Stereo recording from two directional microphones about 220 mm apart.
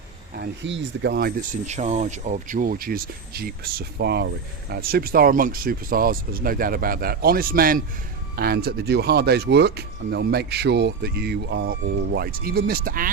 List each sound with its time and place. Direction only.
0.3 s speech: 50° right (ahead or behind)